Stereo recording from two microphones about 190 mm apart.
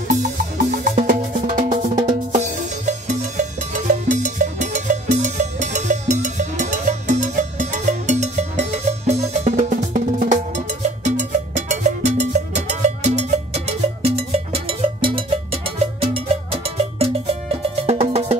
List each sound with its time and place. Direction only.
0.7 s music: 45° right (ahead or behind)
11.1 s cowbell: 40° right (ahead or behind)
16.6 s music: 30° right (ahead or behind)